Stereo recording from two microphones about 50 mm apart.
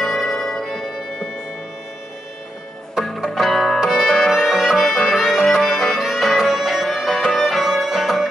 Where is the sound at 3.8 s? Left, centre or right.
Centre.